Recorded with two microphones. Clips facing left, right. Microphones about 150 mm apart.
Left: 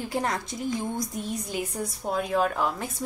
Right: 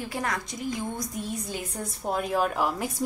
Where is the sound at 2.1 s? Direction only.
5° right (ahead or behind).